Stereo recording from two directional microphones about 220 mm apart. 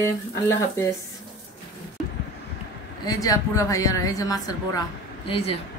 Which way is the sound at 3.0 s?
15° left (ahead or behind).